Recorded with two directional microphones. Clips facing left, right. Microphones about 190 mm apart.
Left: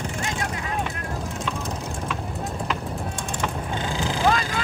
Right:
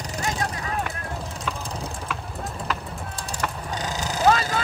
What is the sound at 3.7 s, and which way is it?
Vehicle, 40° right (ahead or behind).